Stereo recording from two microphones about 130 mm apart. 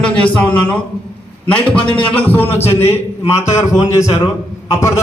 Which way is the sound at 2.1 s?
15° left (ahead or behind).